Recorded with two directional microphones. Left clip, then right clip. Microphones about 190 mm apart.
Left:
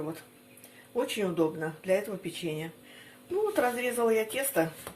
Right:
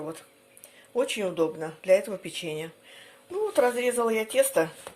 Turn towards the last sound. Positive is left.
turn(degrees=-50)  # may be behind; listen again after turning